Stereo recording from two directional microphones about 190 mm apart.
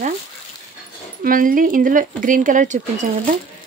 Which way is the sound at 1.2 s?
45° right (ahead or behind).